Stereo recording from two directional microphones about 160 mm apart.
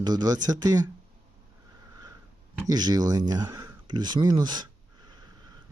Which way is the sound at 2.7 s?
25° right (ahead or behind).